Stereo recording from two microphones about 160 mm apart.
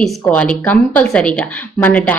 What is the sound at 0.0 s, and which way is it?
Speech, 5° left (ahead or behind).